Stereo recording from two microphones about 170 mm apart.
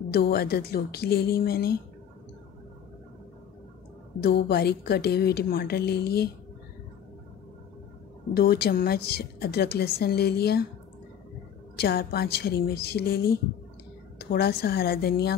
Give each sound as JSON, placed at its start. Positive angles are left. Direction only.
{"t": 0.1, "sound": "a woman's voice", "side_deg": 65}
{"t": 4.2, "sound": "a woman's voice", "side_deg": 70}
{"t": 8.4, "sound": "a woman's voice", "side_deg": 70}
{"t": 11.7, "sound": "a woman's voice", "side_deg": 65}